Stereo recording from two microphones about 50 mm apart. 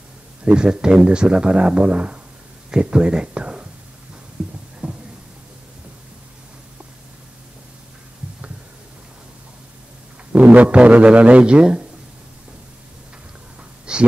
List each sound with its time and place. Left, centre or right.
0.5 s a man's voice: centre
4.4 s throbbing: centre
4.8 s a sound: right
10.3 s a man's voice: right
13.9 s a man's voice: centre